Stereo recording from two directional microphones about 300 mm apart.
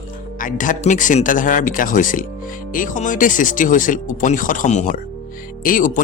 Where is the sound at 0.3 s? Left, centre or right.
Left.